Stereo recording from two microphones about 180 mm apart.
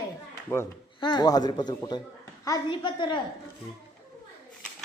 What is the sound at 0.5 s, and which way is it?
Speech, 10° left (ahead or behind).